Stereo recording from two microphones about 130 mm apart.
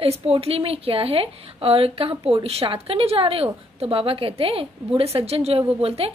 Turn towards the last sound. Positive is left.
turn(degrees=-50)  # may be behind; listen again after turning